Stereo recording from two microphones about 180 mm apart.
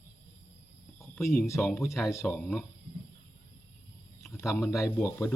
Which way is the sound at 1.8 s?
Centre (ahead or behind).